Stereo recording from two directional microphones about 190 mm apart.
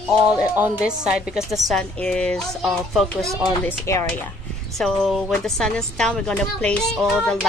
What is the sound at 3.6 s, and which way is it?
Speech, 10° left (ahead or behind).